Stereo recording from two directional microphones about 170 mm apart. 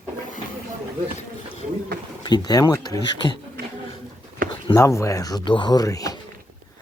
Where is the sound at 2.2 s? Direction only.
25° left (ahead or behind).